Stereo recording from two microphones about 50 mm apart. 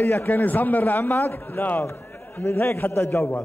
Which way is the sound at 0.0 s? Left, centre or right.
Left.